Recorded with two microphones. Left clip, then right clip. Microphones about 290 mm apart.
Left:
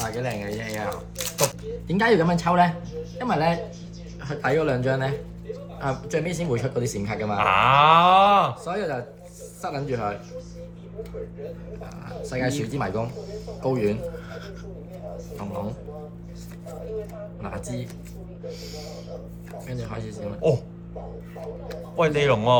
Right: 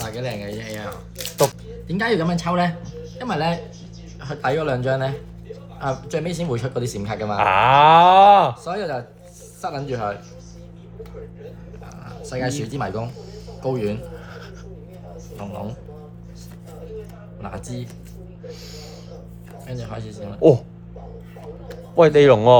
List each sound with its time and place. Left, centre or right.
0.2 s speech: centre
7.3 s speech: right
8.6 s speech: centre
12.1 s speech: centre
19.6 s speech: centre
21.9 s speech: right